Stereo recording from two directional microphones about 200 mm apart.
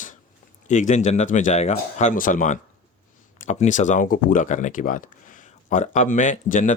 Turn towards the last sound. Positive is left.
turn(degrees=40)  # may be behind; listen again after turning